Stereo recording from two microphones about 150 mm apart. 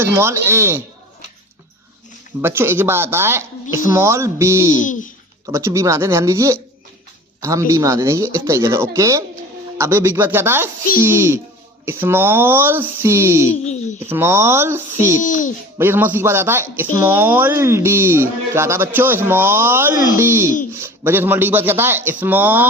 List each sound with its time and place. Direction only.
0.0 s speech: 15° right (ahead or behind)
2.4 s speech: 15° right (ahead or behind)
4.8 s a child's voice: 60° left (ahead or behind)
5.5 s speech: 20° right (ahead or behind)
15.2 s a child's voice: 60° left (ahead or behind)
15.8 s speech: 15° right (ahead or behind)